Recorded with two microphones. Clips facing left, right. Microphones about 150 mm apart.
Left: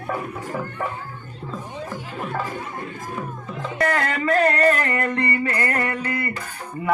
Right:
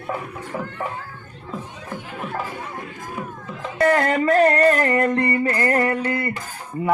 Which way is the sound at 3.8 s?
30° right (ahead or behind).